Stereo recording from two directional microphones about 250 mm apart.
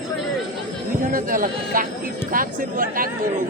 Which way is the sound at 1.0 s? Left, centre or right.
Right.